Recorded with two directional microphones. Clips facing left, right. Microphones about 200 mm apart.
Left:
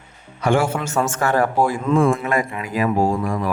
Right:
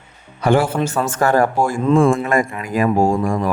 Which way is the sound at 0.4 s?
35° right (ahead or behind).